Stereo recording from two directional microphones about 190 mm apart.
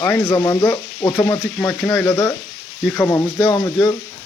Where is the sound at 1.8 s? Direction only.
5° left (ahead or behind).